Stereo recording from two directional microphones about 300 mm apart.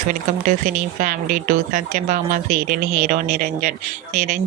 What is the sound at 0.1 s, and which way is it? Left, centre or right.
Speech, right.